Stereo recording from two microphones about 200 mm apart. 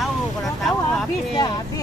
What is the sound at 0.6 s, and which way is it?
Speech, centre (ahead or behind).